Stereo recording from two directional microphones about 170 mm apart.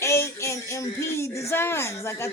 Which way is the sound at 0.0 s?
15° left (ahead or behind).